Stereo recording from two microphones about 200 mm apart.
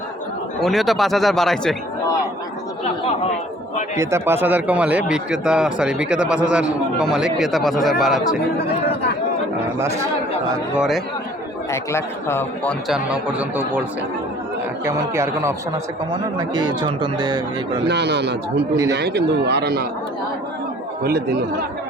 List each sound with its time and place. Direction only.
0.6 s a man's voice: centre (ahead or behind)
3.9 s a man's voice: 15° right (ahead or behind)
10.8 s a man's voice: centre (ahead or behind)
11.7 s a man's voice: 15° left (ahead or behind)
12.9 s a man's voice: 5° right (ahead or behind)
14.8 s speech: 15° right (ahead or behind)
17.8 s a man's voice: 55° right (ahead or behind)
21.0 s speech: 50° right (ahead or behind)